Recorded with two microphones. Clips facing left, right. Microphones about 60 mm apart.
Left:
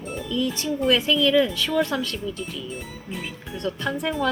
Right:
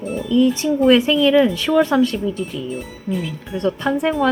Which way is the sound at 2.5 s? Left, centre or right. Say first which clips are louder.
Right 7 dB; centre.